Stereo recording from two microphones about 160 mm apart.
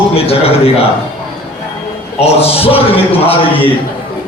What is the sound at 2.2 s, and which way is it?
A man's voice, 40° left (ahead or behind).